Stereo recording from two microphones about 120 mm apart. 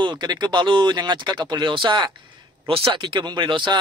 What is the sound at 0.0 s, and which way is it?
Speech, 40° right (ahead or behind).